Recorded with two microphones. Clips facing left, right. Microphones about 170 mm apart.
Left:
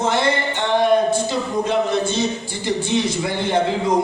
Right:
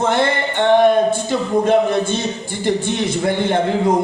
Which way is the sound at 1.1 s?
55° right (ahead or behind).